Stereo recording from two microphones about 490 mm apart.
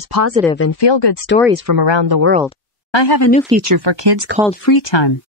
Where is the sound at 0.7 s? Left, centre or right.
Left.